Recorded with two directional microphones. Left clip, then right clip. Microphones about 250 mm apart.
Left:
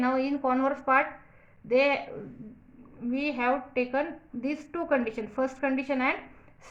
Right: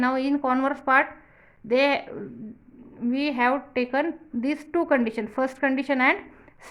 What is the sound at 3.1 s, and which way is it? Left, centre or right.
A woman's voice, right.